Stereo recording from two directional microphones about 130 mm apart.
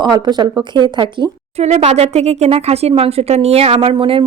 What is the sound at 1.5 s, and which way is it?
Speech, 55° right (ahead or behind).